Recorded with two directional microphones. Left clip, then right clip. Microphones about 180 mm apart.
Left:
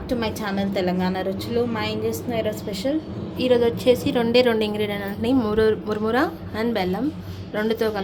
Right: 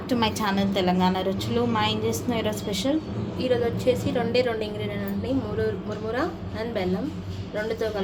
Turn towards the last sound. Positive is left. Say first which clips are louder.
# left 4 dB
turn(degrees=50)  # may be behind; listen again after turning